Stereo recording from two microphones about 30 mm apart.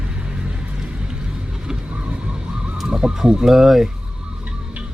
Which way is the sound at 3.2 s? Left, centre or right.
Right.